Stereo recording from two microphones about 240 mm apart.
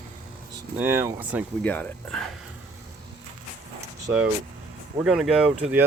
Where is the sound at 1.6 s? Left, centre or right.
Centre.